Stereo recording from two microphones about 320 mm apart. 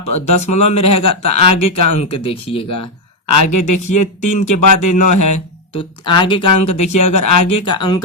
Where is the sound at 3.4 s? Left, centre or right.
Left.